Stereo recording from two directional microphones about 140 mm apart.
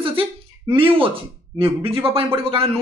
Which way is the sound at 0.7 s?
40° right (ahead or behind).